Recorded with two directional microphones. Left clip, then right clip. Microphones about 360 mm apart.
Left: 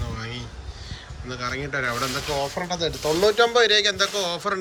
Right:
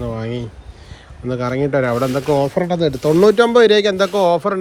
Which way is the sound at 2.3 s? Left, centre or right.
Right.